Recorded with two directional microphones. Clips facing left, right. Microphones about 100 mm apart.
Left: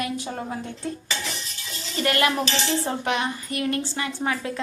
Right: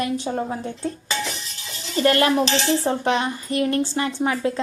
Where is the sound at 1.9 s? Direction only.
30° right (ahead or behind).